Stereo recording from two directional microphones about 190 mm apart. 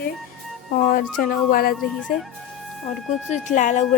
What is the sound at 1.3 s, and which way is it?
Speech, 50° left (ahead or behind).